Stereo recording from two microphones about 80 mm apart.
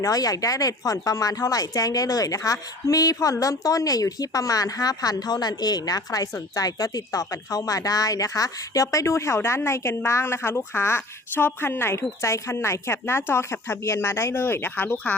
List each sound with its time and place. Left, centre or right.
0.0 s speech: left